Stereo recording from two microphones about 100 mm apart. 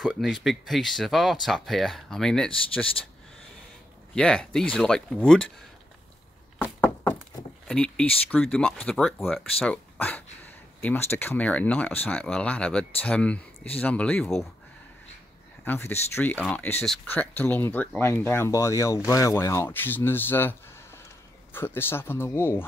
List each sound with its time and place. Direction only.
0.2 s speech: centre (ahead or behind)
4.1 s speech: 10° left (ahead or behind)
6.6 s a sound: 20° left (ahead or behind)
7.6 s speech: 10° left (ahead or behind)
15.6 s speech: 20° left (ahead or behind)